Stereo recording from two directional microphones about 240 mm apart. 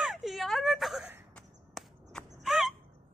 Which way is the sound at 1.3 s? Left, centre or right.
Centre.